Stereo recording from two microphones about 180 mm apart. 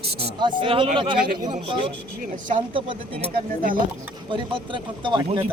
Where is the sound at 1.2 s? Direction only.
50° right (ahead or behind).